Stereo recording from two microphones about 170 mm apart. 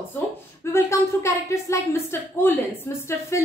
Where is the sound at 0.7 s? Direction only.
15° left (ahead or behind).